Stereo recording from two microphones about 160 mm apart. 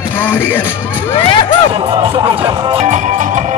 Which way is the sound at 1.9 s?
30° right (ahead or behind).